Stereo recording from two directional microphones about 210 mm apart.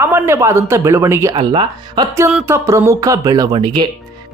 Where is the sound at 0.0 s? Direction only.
10° right (ahead or behind).